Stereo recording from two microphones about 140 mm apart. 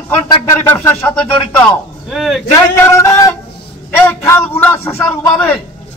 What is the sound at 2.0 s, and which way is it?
Speech, centre (ahead or behind).